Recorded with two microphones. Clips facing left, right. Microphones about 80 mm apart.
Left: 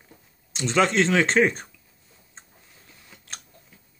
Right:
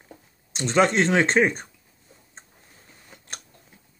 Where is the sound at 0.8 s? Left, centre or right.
Right.